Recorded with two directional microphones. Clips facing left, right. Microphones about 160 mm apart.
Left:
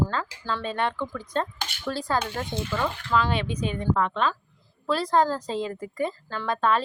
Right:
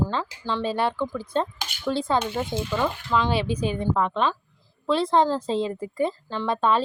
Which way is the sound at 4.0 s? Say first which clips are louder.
Right 2 dB; 5° right (ahead or behind).